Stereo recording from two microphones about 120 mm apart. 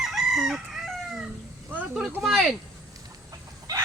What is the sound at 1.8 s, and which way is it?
Vehicle, 10° right (ahead or behind).